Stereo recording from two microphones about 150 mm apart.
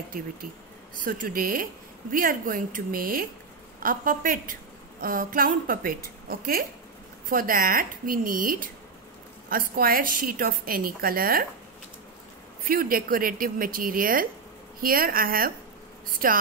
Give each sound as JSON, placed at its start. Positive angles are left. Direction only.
{"t": 0.9, "sound": "a woman's voice", "side_deg": -60}
{"t": 7.2, "sound": "a woman's voice", "side_deg": -70}
{"t": 12.6, "sound": "a woman's voice", "side_deg": -75}